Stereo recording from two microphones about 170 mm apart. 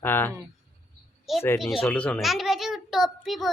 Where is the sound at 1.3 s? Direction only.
Centre (ahead or behind).